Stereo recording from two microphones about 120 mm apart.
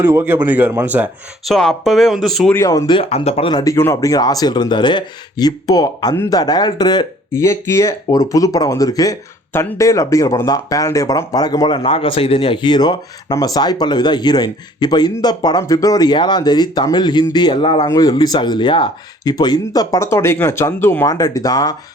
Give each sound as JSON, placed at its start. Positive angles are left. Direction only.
{"t": 0.0, "sound": "speech", "side_deg": -20}
{"t": 1.5, "sound": "speech", "side_deg": 0}
{"t": 2.6, "sound": "speech", "side_deg": 30}
{"t": 2.9, "sound": "speech", "side_deg": 50}
{"t": 3.5, "sound": "speech", "side_deg": 30}
{"t": 7.3, "sound": "speech", "side_deg": 25}
{"t": 17.8, "sound": "speech", "side_deg": 30}